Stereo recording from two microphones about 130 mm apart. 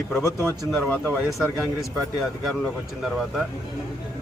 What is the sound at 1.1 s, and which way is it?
Speech, centre (ahead or behind).